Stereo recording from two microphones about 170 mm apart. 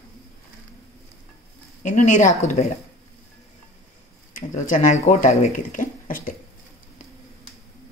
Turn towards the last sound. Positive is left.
turn(degrees=50)  # may be behind; listen again after turning